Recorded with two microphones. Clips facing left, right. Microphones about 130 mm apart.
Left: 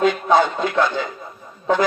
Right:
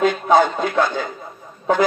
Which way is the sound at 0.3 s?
45° right (ahead or behind).